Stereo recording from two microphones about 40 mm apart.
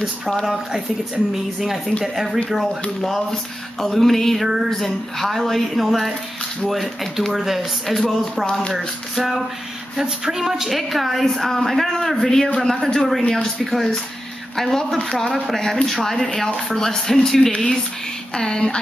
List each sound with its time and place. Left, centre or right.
1.6 s speech: centre
9.1 s music: centre
10.0 s speech: centre